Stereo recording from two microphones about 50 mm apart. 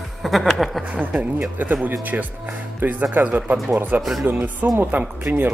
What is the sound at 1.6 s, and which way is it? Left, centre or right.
Speech, right.